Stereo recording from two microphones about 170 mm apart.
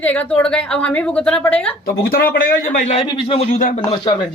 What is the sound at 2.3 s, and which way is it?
Speech, 55° left (ahead or behind).